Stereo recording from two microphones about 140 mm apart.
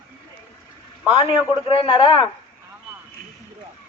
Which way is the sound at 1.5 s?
40° left (ahead or behind).